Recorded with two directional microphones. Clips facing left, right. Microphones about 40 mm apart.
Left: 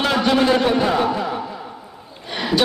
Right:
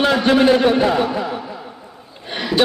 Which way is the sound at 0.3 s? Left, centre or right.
Right.